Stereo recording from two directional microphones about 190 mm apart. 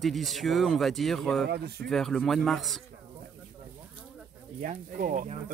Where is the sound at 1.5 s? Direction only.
60° right (ahead or behind).